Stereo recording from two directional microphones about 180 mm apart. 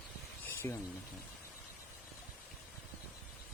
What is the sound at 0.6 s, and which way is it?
Speech, 20° left (ahead or behind).